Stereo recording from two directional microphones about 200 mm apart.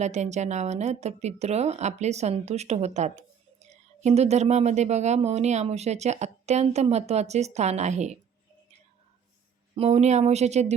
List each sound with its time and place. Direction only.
0.0 s speech: 35° right (ahead or behind)
9.7 s speech: 30° right (ahead or behind)